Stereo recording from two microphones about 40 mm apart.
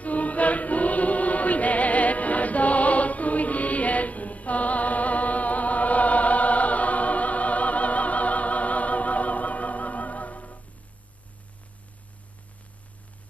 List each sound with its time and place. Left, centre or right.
0.0 s choir: left